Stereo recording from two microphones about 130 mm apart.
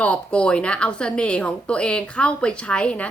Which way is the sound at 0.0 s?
10° left (ahead or behind).